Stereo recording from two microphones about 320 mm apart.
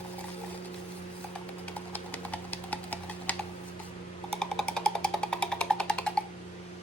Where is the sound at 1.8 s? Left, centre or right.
Centre.